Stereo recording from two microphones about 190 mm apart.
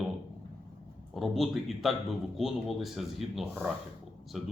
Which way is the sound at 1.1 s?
Centre (ahead or behind).